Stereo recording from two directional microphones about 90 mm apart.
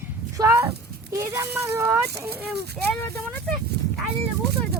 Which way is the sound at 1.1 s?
35° right (ahead or behind).